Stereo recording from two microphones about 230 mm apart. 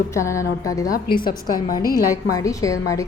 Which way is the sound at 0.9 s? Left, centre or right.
Left.